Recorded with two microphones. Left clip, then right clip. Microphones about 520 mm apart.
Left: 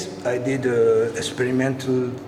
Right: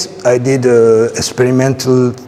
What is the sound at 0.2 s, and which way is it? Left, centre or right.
Speech, right.